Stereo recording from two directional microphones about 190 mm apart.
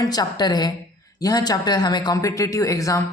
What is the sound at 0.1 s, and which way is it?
A woman's voice, 20° left (ahead or behind).